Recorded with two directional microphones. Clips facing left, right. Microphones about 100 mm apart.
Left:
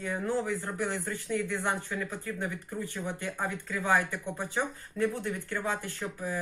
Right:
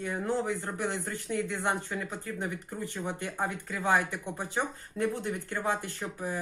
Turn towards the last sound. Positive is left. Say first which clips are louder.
# even
turn(degrees=-20)  # may be behind; listen again after turning